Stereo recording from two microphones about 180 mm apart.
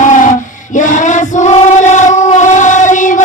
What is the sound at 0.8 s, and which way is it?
Train, 45° left (ahead or behind).